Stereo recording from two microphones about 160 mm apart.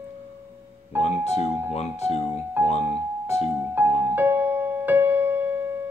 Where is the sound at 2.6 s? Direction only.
10° right (ahead or behind).